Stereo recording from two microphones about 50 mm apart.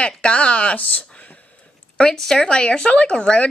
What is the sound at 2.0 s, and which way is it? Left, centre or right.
A woman's voice, centre.